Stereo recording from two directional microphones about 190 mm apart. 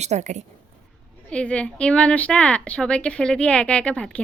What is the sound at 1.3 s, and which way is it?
Speech, 5° left (ahead or behind).